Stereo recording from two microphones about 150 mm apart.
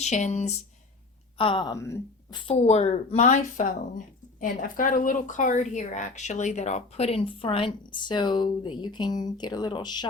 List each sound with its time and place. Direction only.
0.0 s a woman's voice: 50° left (ahead or behind)
1.4 s a woman's voice: 35° left (ahead or behind)
1.7 s speech: 20° left (ahead or behind)
2.3 s a woman's voice: 40° left (ahead or behind)